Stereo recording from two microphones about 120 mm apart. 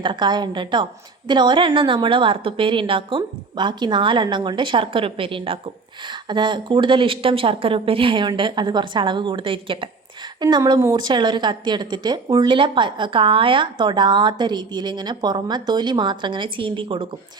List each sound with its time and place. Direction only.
0.0 s a woman's voice: 40° right (ahead or behind)
10.9 s speech: 40° right (ahead or behind)